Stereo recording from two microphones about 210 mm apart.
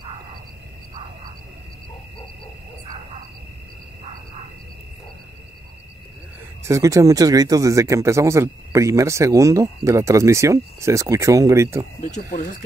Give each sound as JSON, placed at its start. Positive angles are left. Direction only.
{"t": 6.7, "sound": "speech", "side_deg": -15}
{"t": 12.0, "sound": "speech", "side_deg": 35}